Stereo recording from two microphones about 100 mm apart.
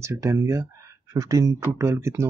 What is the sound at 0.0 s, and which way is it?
Speech, 30° right (ahead or behind).